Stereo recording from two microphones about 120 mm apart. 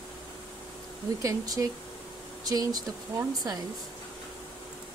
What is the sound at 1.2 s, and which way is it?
Speech, 25° right (ahead or behind).